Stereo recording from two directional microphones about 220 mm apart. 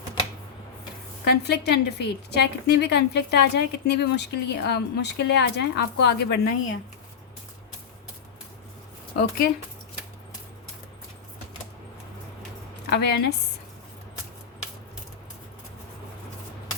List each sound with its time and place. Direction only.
1.2 s a woman's voice: 50° left (ahead or behind)
12.9 s a woman's voice: 50° left (ahead or behind)